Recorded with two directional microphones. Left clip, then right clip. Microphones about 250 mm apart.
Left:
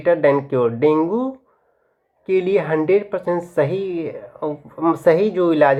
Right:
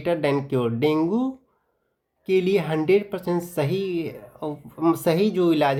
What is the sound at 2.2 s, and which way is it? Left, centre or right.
Speech, right.